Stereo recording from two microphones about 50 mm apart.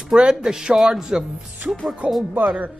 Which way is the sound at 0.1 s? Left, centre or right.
Centre.